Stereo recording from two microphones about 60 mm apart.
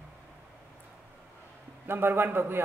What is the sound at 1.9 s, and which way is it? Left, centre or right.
Speech, right.